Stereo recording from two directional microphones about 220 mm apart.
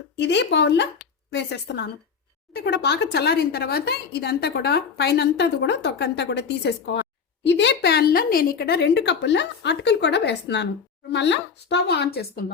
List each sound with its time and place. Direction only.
0.2 s speech: 50° left (ahead or behind)